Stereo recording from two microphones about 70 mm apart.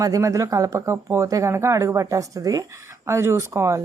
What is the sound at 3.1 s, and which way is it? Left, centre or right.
Speech, right.